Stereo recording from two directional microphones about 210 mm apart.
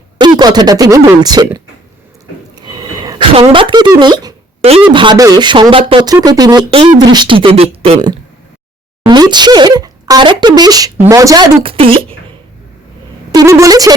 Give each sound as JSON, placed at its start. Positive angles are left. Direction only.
{"t": 0.2, "sound": "speech", "side_deg": -20}
{"t": 2.6, "sound": "a sound", "side_deg": -20}
{"t": 4.7, "sound": "speech", "side_deg": -25}
{"t": 13.3, "sound": "speech", "side_deg": -15}